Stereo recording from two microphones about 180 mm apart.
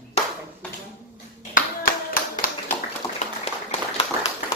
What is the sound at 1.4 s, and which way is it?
Clapping, 50° left (ahead or behind).